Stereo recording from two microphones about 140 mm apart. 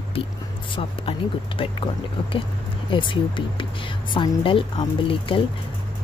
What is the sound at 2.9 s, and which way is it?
Speech, 35° left (ahead or behind).